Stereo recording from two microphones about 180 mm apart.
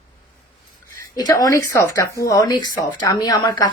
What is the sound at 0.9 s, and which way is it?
Speech, 20° left (ahead or behind).